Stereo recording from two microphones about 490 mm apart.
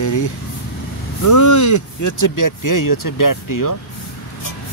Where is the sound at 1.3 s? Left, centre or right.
Left.